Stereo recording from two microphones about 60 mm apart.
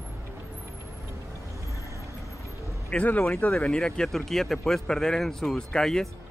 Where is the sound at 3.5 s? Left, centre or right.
Centre.